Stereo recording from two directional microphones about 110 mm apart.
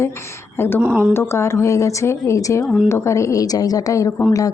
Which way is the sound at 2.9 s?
25° left (ahead or behind).